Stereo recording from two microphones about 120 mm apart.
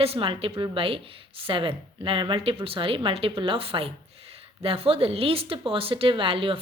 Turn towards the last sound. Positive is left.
turn(degrees=-50)  # may be behind; listen again after turning